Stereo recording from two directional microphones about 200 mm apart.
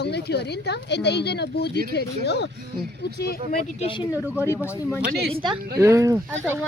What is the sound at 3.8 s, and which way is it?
Speech, 25° left (ahead or behind).